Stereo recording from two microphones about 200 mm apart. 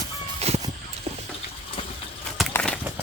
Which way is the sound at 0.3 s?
30° right (ahead or behind).